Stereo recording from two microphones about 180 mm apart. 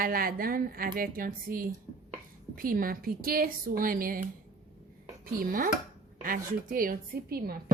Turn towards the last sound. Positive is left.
turn(degrees=-55)  # may be behind; listen again after turning